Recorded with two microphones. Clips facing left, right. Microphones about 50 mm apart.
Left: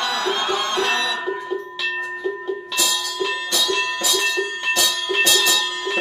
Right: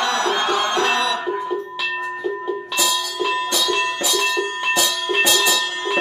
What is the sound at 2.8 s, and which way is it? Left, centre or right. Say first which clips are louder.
Music: right 2 dB; centre.